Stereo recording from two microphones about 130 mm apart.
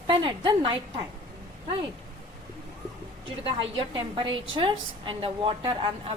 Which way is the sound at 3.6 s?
40° right (ahead or behind).